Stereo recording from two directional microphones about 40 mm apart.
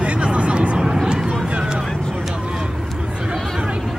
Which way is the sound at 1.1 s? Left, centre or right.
Right.